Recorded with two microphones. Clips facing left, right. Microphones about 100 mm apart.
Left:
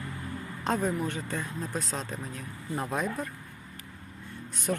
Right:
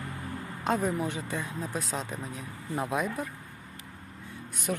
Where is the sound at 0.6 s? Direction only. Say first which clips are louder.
Even; 10° right (ahead or behind).